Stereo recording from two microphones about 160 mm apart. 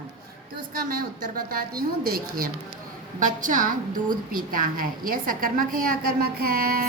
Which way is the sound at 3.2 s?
55° right (ahead or behind).